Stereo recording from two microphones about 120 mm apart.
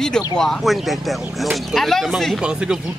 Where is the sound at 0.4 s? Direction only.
Centre (ahead or behind).